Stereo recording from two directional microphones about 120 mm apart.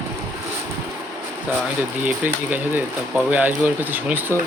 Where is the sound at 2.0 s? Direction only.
15° right (ahead or behind).